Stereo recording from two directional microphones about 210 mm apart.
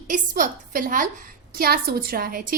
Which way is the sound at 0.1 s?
40° right (ahead or behind).